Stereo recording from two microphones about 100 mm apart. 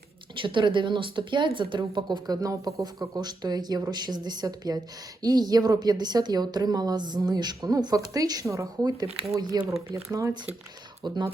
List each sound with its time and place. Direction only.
0.4 s a woman's voice: 55° right (ahead or behind)
9.9 s a woman's voice: 35° right (ahead or behind)
11.0 s speech: 50° right (ahead or behind)